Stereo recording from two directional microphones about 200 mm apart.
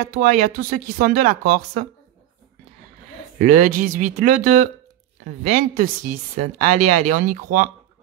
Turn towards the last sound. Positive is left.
turn(degrees=-40)  # may be behind; listen again after turning